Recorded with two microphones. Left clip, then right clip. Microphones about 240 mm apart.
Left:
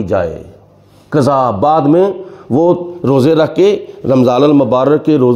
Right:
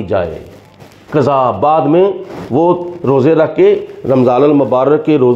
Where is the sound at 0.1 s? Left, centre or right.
Left.